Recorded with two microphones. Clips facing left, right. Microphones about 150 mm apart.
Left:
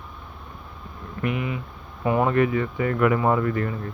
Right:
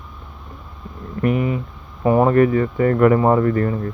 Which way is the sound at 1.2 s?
40° right (ahead or behind).